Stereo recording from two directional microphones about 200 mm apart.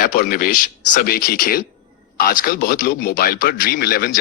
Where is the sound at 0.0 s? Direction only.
45° left (ahead or behind).